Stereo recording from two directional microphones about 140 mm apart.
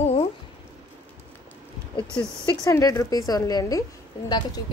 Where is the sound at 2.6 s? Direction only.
25° left (ahead or behind).